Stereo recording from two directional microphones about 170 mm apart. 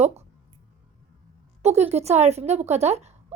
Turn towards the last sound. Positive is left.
turn(degrees=-40)  # may be behind; listen again after turning